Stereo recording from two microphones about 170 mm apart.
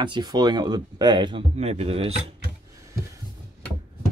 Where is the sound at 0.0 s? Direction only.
25° right (ahead or behind).